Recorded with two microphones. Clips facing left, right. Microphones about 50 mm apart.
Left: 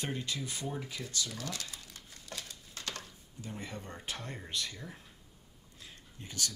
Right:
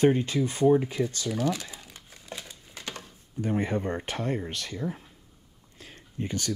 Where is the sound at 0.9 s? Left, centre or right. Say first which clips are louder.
Right 11 dB; right.